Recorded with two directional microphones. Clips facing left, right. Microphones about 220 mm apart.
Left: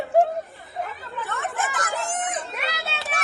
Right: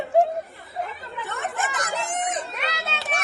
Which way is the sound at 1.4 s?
Centre (ahead or behind).